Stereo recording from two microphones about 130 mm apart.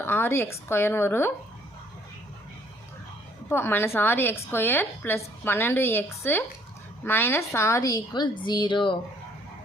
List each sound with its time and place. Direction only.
0.0 s a woman's voice: 20° left (ahead or behind)
3.5 s a woman's voice: 15° left (ahead or behind); by 9.0 s 35° left (ahead or behind)